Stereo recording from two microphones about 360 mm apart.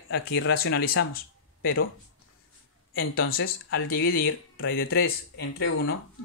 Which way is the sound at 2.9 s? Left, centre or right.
Left.